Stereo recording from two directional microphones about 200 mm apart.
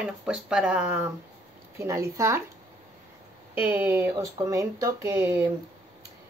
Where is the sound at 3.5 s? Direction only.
10° right (ahead or behind).